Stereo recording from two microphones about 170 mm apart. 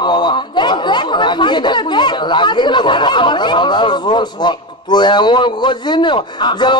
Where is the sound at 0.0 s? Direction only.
25° left (ahead or behind).